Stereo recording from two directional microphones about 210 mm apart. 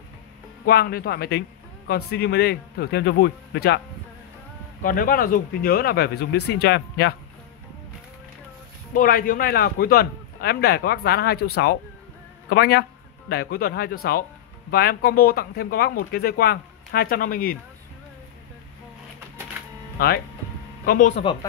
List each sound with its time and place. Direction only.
0.7 s speech: 50° left (ahead or behind)
4.8 s speech: 40° left (ahead or behind)
8.9 s speech: 40° left (ahead or behind)
12.4 s speech: 50° left (ahead or behind)
20.0 s speech: 45° left (ahead or behind)
21.2 s speech: 25° left (ahead or behind)